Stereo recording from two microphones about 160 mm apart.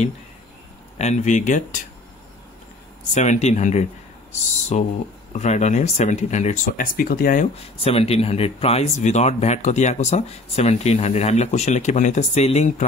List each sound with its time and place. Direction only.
0.9 s speech: 45° left (ahead or behind)
3.2 s speech: 45° left (ahead or behind); by 7.4 s 65° left (ahead or behind)
7.8 s speech: 40° left (ahead or behind)